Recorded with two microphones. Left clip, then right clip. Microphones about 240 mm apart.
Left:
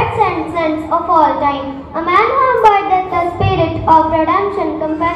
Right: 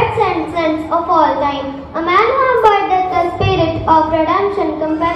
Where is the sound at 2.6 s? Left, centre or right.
Left.